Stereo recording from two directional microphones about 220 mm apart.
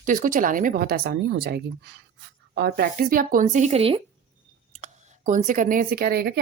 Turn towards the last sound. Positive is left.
turn(degrees=-45)  # may be behind; listen again after turning